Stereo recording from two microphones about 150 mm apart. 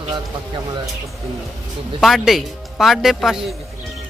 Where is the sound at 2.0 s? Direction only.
Centre (ahead or behind).